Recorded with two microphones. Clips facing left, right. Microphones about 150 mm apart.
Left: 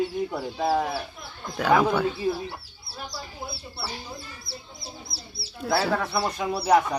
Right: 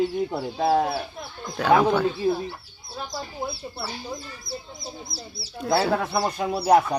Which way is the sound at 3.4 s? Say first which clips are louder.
Right 6 dB; 45° right (ahead or behind).